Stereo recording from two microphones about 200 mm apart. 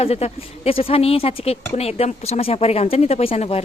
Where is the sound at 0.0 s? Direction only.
30° left (ahead or behind).